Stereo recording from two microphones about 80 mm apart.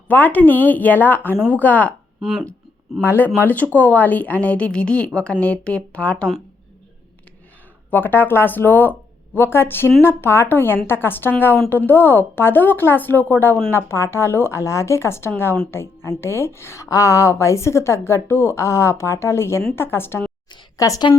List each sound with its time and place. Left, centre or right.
0.1 s a woman's voice: left
3.0 s speech: left
7.9 s a woman's voice: left
20.7 s a woman's voice: left